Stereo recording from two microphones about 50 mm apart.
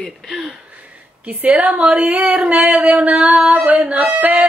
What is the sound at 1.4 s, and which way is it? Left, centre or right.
Singing, right.